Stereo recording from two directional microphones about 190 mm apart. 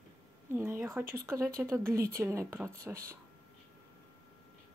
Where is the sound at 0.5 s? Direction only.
15° right (ahead or behind).